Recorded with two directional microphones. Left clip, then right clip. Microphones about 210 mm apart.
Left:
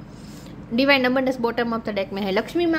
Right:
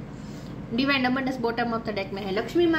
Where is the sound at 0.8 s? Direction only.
40° left (ahead or behind).